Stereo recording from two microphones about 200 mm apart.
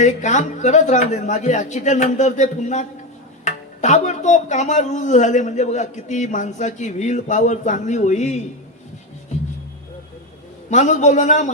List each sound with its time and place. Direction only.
0.0 s speech: 35° left (ahead or behind)
10.7 s speech: 35° left (ahead or behind)